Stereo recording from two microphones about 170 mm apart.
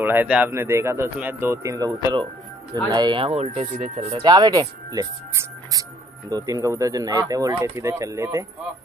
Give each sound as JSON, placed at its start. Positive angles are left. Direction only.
{"t": 0.0, "sound": "speech", "side_deg": -10}
{"t": 4.3, "sound": "speech", "side_deg": -20}